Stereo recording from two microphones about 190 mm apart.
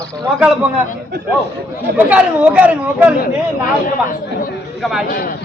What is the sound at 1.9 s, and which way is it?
Speech, 5° right (ahead or behind).